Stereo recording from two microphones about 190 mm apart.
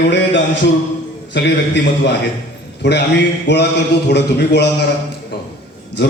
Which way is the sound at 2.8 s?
65° left (ahead or behind).